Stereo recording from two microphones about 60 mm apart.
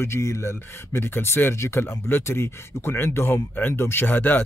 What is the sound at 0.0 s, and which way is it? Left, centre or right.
Speech, left.